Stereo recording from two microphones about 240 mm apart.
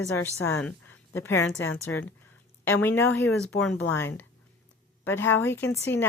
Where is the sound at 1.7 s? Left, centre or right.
Left.